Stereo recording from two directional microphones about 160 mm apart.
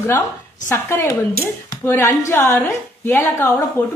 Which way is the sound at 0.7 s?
15° left (ahead or behind).